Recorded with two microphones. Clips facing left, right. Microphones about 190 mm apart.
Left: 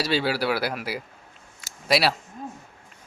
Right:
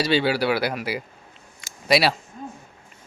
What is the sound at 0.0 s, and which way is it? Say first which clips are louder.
Speech: right 3 dB; centre (ahead or behind).